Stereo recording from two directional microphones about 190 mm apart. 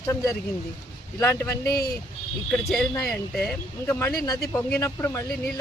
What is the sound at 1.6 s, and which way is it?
Speech, 55° left (ahead or behind).